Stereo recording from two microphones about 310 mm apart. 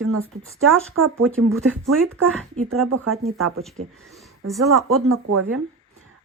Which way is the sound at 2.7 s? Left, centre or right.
Right.